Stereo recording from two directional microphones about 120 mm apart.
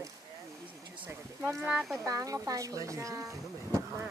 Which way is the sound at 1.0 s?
15° right (ahead or behind).